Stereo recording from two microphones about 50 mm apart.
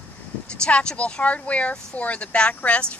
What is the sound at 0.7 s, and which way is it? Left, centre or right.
A woman's voice, left.